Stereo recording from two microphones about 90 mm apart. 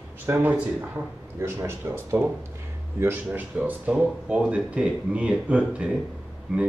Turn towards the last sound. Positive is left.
turn(degrees=-5)  # may be behind; listen again after turning